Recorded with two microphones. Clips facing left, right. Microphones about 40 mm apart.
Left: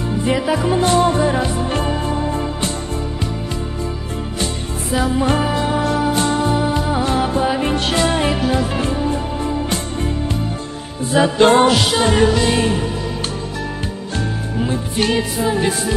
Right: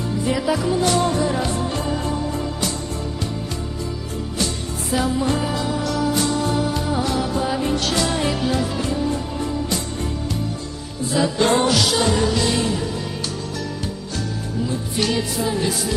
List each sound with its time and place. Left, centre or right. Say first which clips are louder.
0.3 s music: left 3 dB; left
4.9 s music: left 2 dB; centre
5.2 s music: left 4 dB; left
6.5 s music: left 4 dB; left
8.4 s music: left 3 dB; left
8.6 s music: left 3 dB; left
11.1 s music: left 6 dB; left
14.6 s music: left 4 dB; left